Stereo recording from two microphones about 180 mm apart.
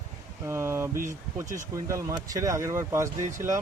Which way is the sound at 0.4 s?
15° right (ahead or behind).